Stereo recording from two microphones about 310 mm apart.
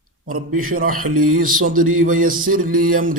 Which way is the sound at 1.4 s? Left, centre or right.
Right.